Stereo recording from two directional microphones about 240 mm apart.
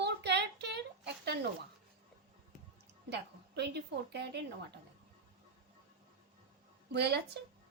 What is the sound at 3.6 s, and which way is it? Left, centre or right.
A woman's voice, right.